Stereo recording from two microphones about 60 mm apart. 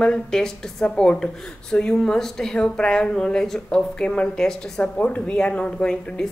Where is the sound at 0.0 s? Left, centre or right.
Centre.